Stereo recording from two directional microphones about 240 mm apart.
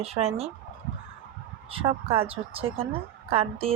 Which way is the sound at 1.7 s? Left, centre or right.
Right.